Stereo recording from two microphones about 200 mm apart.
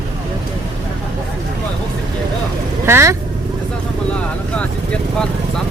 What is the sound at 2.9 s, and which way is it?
Speech, 10° right (ahead or behind).